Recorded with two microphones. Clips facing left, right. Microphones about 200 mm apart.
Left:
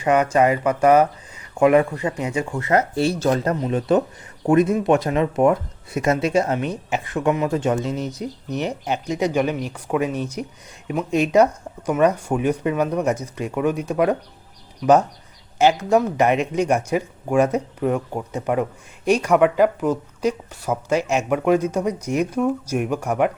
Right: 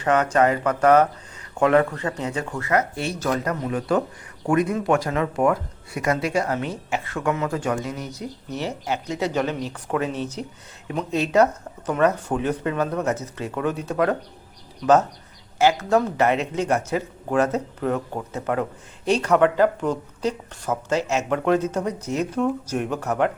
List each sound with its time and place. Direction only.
0.0 s speech: 10° left (ahead or behind)
2.6 s speech: 30° left (ahead or behind); by 14.2 s 15° left (ahead or behind)
15.5 s speech: 15° left (ahead or behind)